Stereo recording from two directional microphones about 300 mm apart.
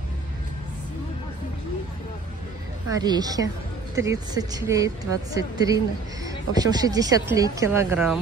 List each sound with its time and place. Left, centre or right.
2.9 s speech: centre